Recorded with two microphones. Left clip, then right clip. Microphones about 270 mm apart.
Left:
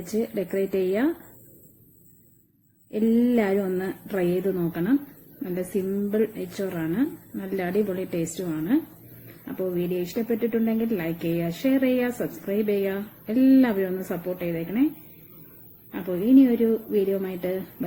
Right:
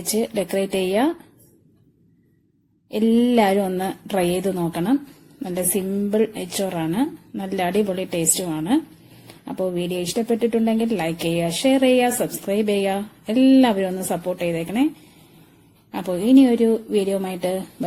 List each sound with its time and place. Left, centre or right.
0.1 s speech: right
2.9 s speech: right
6.1 s speech: right
15.9 s speech: right